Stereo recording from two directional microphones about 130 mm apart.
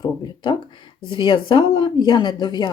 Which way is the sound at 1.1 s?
40° left (ahead or behind).